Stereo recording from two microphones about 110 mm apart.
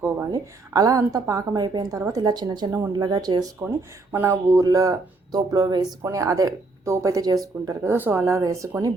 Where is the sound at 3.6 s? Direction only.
25° right (ahead or behind).